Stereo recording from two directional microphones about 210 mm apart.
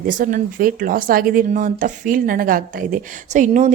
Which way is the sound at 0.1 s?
40° right (ahead or behind).